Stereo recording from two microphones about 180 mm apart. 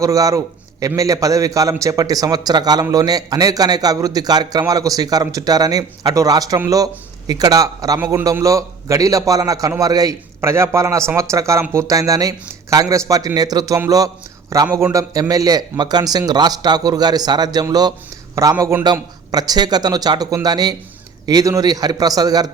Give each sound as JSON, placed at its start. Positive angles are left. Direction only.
{"t": 0.0, "sound": "a man's voice", "side_deg": -20}